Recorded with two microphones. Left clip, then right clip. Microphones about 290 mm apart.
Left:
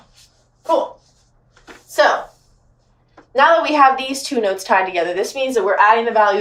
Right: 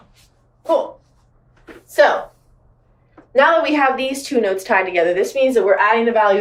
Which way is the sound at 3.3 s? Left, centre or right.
Centre.